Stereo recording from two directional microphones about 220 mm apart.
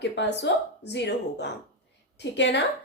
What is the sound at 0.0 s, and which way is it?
A woman's voice, 50° left (ahead or behind).